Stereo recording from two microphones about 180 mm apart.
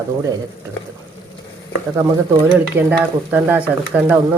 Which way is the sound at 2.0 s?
10° right (ahead or behind).